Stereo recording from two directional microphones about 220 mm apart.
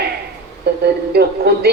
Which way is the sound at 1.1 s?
45° right (ahead or behind).